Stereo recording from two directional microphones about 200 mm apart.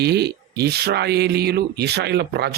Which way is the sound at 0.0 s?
55° right (ahead or behind).